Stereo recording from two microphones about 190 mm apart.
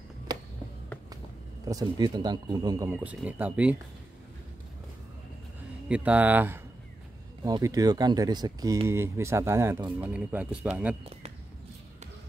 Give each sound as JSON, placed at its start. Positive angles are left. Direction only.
{"t": 1.7, "sound": "speech", "side_deg": -20}
{"t": 5.9, "sound": "speech", "side_deg": -5}